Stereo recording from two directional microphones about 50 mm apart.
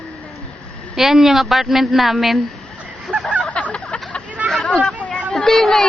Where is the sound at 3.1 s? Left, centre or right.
Right.